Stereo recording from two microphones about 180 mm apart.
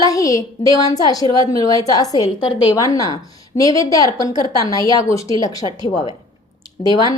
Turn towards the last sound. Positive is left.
turn(degrees=20)  # may be behind; listen again after turning